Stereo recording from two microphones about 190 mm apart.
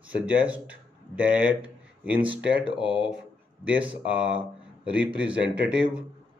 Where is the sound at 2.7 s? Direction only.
25° left (ahead or behind).